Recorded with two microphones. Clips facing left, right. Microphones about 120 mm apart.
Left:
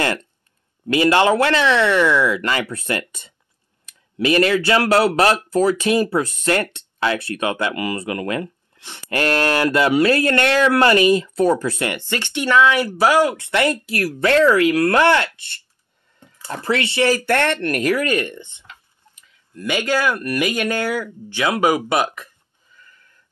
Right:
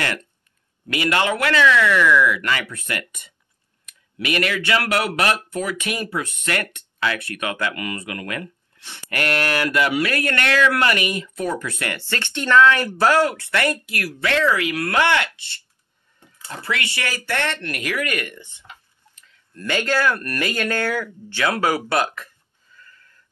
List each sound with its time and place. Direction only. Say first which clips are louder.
0.0 s speech: left 5 dB; 30° left (ahead or behind)
13.9 s speech: left 6 dB; 40° left (ahead or behind)
16.4 s speech: left 6 dB; 35° left (ahead or behind)
17.3 s speech: left 7 dB; 50° left (ahead or behind); by 18.6 s 25° left (ahead or behind)
19.1 s speech: left 3 dB; 10° left (ahead or behind)
22.8 s a sound: right 1 dB; 15° left (ahead or behind)